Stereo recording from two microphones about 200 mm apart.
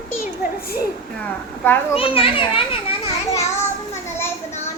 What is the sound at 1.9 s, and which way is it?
A child's voice, 25° left (ahead or behind).